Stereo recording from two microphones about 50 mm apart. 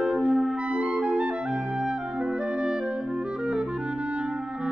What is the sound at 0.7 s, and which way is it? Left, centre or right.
Clarinet, right.